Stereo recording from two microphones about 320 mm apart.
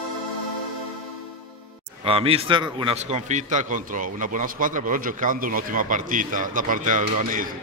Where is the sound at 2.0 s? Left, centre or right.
Centre.